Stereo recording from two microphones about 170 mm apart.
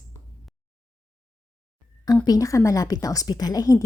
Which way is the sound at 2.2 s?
20° left (ahead or behind).